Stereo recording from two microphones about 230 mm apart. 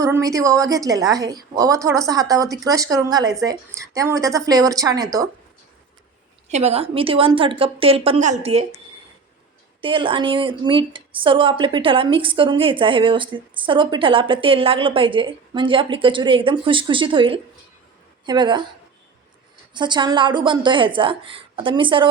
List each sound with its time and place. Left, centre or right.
0.0 s a woman's voice: centre
6.5 s a woman's voice: right
9.8 s a woman's voice: right
19.7 s a woman's voice: centre